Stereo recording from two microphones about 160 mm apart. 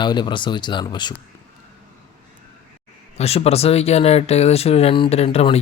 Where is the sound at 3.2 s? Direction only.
40° left (ahead or behind).